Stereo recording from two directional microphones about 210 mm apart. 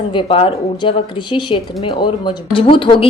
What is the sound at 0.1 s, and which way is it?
A woman's voice, 25° left (ahead or behind).